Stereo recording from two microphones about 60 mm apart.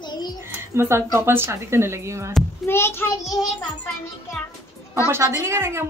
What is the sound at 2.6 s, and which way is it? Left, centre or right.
Speech, left.